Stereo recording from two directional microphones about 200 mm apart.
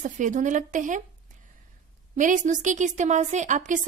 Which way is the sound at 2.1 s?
40° right (ahead or behind).